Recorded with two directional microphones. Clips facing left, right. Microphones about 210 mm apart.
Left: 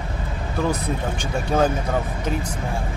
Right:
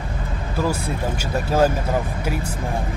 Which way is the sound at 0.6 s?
10° right (ahead or behind).